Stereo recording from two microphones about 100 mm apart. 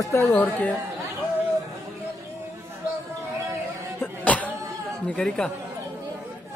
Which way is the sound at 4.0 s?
15° left (ahead or behind).